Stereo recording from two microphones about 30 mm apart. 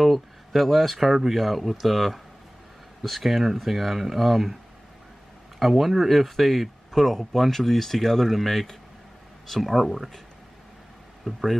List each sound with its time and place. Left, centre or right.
0.0 s speech: centre
5.6 s speech: centre
11.3 s speech: centre